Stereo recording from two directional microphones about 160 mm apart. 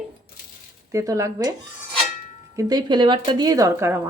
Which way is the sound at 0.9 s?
20° right (ahead or behind).